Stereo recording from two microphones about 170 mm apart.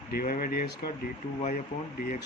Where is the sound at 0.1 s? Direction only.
60° left (ahead or behind).